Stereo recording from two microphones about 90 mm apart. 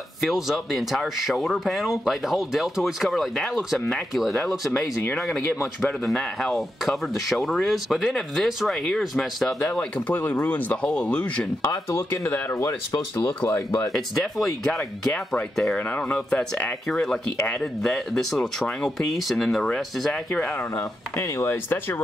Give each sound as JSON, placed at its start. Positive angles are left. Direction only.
{"t": 0.2, "sound": "speech", "side_deg": 0}
{"t": 6.0, "sound": "speech", "side_deg": 5}
{"t": 10.0, "sound": "speech", "side_deg": 15}
{"t": 11.6, "sound": "speech", "side_deg": 30}
{"t": 13.9, "sound": "speech", "side_deg": 5}
{"t": 16.1, "sound": "speech", "side_deg": 15}
{"t": 20.7, "sound": "speech", "side_deg": 30}